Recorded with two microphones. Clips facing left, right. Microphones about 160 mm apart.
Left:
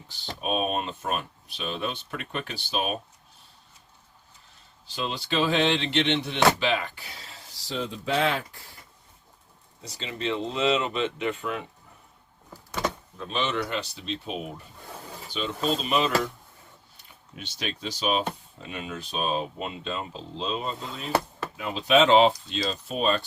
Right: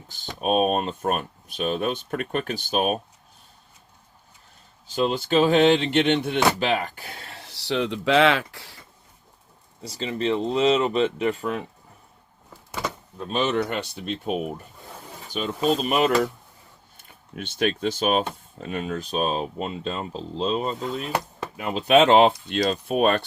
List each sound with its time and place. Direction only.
0.1 s speech: 50° right (ahead or behind)
4.9 s speech: 45° right (ahead or behind); by 8.8 s 85° right
9.9 s speech: 40° right (ahead or behind)
13.1 s speech: 40° right (ahead or behind)
17.3 s speech: 55° right (ahead or behind)